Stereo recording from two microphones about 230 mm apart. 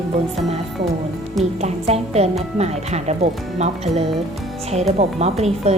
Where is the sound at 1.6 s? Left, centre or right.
Right.